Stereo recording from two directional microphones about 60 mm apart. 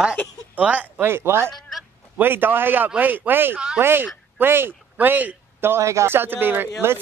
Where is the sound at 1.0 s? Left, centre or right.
Right.